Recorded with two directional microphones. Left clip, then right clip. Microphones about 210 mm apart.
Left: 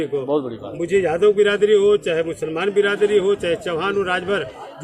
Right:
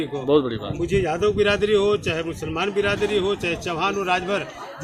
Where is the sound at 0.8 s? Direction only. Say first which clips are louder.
Left 5 dB; 5° left (ahead or behind).